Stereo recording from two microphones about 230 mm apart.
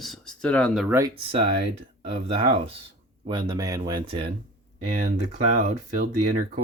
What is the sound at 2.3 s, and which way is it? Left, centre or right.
Speech, right.